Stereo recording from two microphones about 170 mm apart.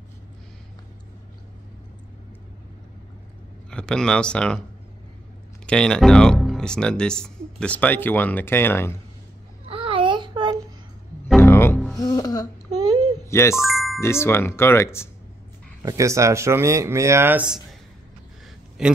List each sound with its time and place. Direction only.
3.7 s speech: 5° left (ahead or behind)
5.7 s speech: 5° left (ahead or behind)
9.7 s a sound: 30° right (ahead or behind)
11.3 s music: 15° left (ahead or behind)
12.7 s a sound: 25° right (ahead or behind)
13.3 s music: 15° left (ahead or behind)
13.6 s speech: centre (ahead or behind)
13.9 s speech: 15° left (ahead or behind)
15.8 s speech: 20° right (ahead or behind)
18.8 s speech: 5° right (ahead or behind)